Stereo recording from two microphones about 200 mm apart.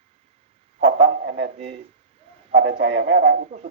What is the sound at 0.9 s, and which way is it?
Speech, 30° right (ahead or behind).